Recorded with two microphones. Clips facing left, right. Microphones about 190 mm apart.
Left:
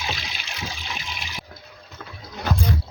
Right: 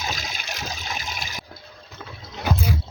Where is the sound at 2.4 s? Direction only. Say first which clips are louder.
Even; 5° right (ahead or behind).